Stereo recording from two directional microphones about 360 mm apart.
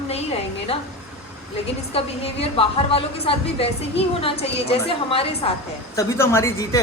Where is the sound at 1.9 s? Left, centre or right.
Centre.